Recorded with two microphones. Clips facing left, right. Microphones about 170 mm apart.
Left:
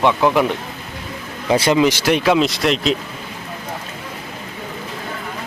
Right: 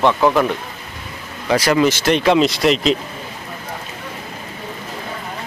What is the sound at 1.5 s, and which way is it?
Speech, 25° left (ahead or behind).